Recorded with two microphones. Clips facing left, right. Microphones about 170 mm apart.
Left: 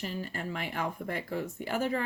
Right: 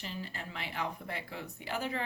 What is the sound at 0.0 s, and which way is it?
Speech, 45° left (ahead or behind).